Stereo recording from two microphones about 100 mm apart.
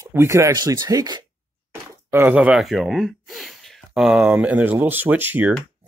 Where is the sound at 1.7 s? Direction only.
20° right (ahead or behind).